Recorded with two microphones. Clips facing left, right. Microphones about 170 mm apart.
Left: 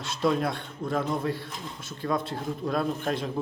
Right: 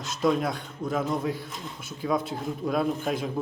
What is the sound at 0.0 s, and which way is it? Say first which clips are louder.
A man's voice: right 1 dB; centre (ahead or behind).